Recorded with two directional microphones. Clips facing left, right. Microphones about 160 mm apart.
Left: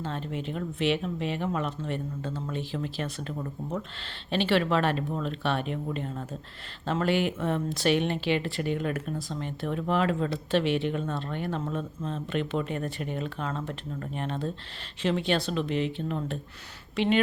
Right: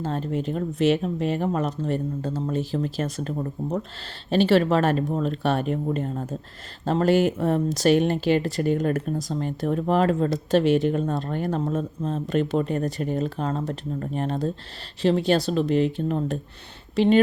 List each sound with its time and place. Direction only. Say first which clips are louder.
0.0 s speech: right 7 dB; 40° right (ahead or behind)